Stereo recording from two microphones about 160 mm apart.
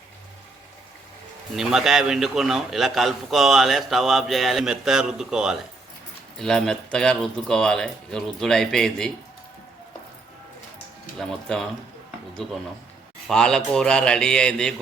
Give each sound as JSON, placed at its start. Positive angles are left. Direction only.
{"t": 1.5, "sound": "a man's voice", "side_deg": -5}
{"t": 11.2, "sound": "a man's voice", "side_deg": 5}